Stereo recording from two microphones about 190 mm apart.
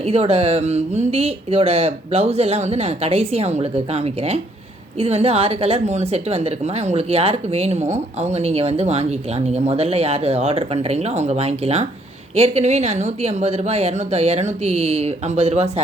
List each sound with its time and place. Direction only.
0.1 s a woman's voice: 35° right (ahead or behind)